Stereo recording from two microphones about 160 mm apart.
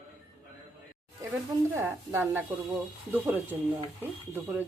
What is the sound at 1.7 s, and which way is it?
Speech, 15° right (ahead or behind).